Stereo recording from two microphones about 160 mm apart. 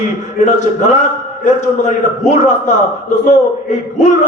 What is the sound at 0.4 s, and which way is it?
A man's voice, 50° left (ahead or behind).